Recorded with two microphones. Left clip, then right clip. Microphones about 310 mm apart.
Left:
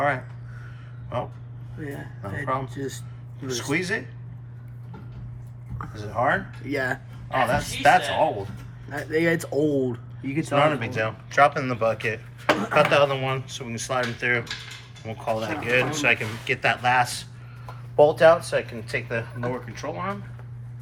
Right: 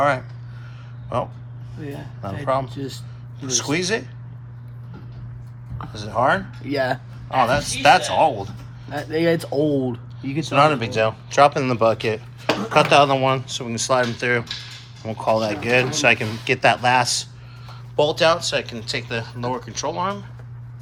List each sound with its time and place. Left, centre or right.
1.1 s speech: centre
5.9 s speech: centre
6.7 s speech: right
7.3 s speech: centre
9.0 s speech: right
10.4 s speech: centre